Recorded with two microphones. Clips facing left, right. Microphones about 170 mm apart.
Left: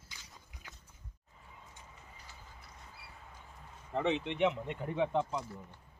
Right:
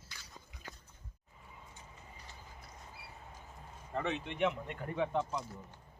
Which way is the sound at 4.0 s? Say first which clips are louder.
Left 3 dB; 20° left (ahead or behind).